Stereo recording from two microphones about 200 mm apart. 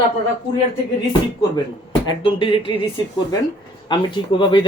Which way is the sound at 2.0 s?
25° left (ahead or behind).